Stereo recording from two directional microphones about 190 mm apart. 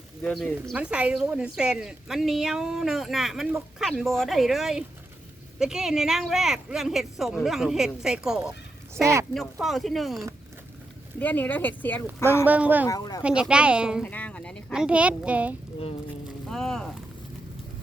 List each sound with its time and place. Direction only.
0.2 s a woman's voice: 5° left (ahead or behind)
0.7 s a woman's voice: 5° right (ahead or behind)
12.5 s speech: 10° right (ahead or behind)
12.9 s speech: 20° left (ahead or behind)
13.2 s a woman's voice: 5° right (ahead or behind)
14.0 s speech: 10° left (ahead or behind); by 15.5 s 5° right (ahead or behind)
16.5 s a sound: centre (ahead or behind)